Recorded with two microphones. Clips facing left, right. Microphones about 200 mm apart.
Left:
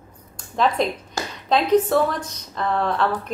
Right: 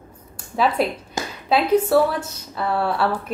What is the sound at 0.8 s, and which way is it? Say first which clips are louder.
Speech: right 1 dB; 5° right (ahead or behind).